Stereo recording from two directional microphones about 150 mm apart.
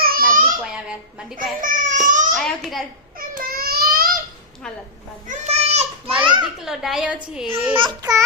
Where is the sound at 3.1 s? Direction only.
70° right (ahead or behind).